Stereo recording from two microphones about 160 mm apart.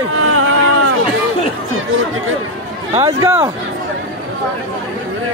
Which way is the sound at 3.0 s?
15° right (ahead or behind).